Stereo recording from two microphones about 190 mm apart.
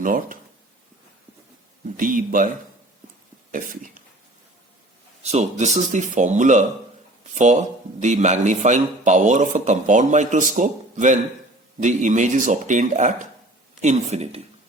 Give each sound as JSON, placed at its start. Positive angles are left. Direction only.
{"t": 0.0, "sound": "speech", "side_deg": -45}
{"t": 2.0, "sound": "speech", "side_deg": -45}
{"t": 3.5, "sound": "speech", "side_deg": -45}
{"t": 5.2, "sound": "a man's voice", "side_deg": -35}